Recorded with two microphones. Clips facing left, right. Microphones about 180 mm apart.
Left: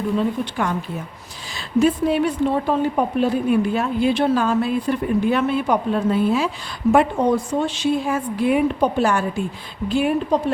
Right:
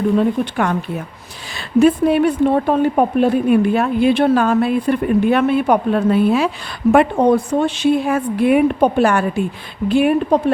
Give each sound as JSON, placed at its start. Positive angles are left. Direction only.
{"t": 0.2, "sound": "a woman's voice", "side_deg": -60}